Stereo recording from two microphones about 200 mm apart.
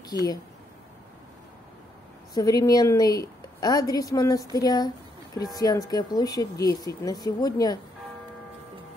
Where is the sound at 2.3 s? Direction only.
20° left (ahead or behind).